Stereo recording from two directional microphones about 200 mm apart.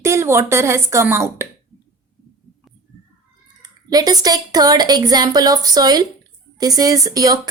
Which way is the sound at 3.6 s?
20° right (ahead or behind).